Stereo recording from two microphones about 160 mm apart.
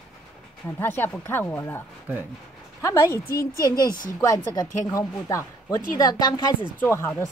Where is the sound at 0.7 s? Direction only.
15° left (ahead or behind).